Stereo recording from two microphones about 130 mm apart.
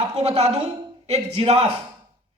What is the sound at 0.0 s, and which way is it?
A man's voice, 60° right (ahead or behind).